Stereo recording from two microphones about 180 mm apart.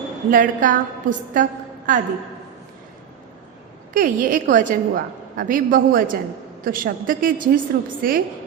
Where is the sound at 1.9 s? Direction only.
45° right (ahead or behind).